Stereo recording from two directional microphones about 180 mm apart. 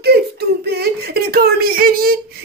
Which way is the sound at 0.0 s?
60° right (ahead or behind).